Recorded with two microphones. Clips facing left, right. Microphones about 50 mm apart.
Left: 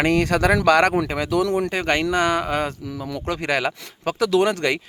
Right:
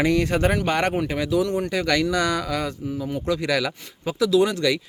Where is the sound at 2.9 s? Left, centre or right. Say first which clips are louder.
Right 2 dB; left.